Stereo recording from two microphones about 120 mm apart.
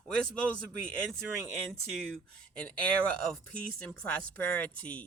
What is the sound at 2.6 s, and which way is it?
Speech, 10° left (ahead or behind).